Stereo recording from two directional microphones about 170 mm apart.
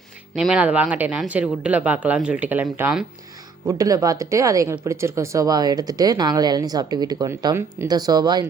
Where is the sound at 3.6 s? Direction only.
20° right (ahead or behind).